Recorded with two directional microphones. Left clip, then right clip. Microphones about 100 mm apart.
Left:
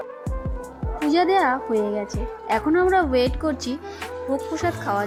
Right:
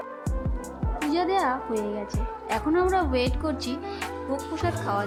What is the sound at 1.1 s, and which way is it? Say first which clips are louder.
Speech: left 6 dB; 40° left (ahead or behind).